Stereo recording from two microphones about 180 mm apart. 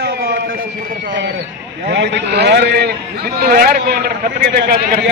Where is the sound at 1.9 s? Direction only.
75° right (ahead or behind).